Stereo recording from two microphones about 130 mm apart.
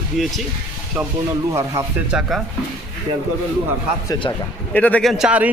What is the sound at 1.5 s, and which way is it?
Speech, 20° right (ahead or behind).